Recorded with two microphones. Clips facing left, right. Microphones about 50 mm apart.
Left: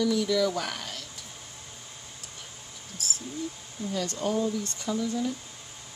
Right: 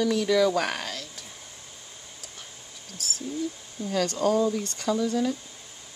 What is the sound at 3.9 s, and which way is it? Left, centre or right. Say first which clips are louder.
Speech: right 5 dB; right.